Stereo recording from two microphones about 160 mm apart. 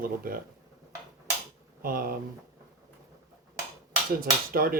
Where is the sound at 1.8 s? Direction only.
65° right (ahead or behind).